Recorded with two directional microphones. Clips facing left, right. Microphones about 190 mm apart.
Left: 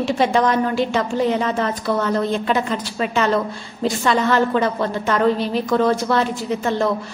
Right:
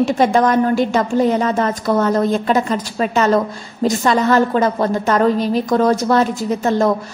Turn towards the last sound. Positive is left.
turn(degrees=-40)  # may be behind; listen again after turning